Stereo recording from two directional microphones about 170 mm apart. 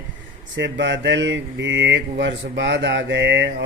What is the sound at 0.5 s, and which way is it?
Speech, 90° right.